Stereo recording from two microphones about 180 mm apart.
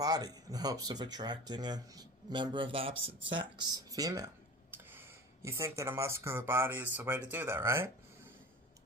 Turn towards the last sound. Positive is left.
turn(degrees=-15)  # may be behind; listen again after turning